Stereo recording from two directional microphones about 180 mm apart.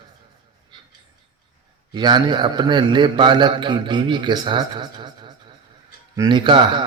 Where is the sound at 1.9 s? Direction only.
25° right (ahead or behind).